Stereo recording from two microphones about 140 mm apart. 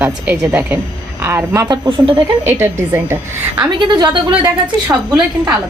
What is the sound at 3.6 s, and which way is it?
Speech, 30° right (ahead or behind).